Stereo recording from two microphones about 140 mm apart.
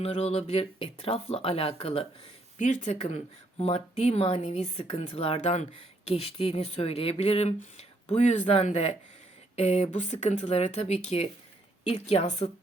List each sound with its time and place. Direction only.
0.0 s speech: 45° left (ahead or behind)
2.6 s speech: 60° left (ahead or behind)